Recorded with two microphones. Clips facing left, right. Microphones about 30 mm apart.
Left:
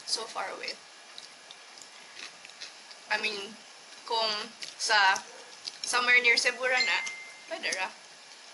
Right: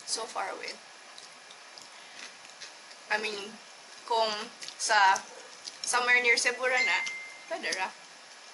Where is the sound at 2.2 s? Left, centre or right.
Centre.